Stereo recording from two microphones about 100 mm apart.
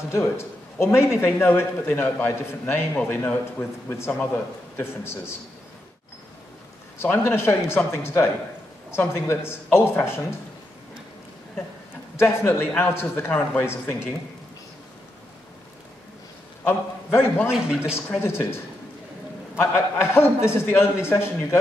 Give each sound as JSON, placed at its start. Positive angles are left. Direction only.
{"t": 0.1, "sound": "a man's voice", "side_deg": 25}
{"t": 7.0, "sound": "a man's voice", "side_deg": 25}
{"t": 12.2, "sound": "a man's voice", "side_deg": 20}
{"t": 16.6, "sound": "a man's voice", "side_deg": 20}
{"t": 17.5, "sound": "a man's voice", "side_deg": -5}
{"t": 18.2, "sound": "a man's voice", "side_deg": 25}